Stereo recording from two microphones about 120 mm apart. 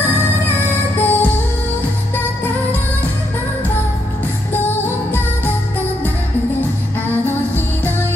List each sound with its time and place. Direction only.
0.9 s music: 15° left (ahead or behind)
4.6 s music: 15° left (ahead or behind)
7.2 s music: 15° left (ahead or behind)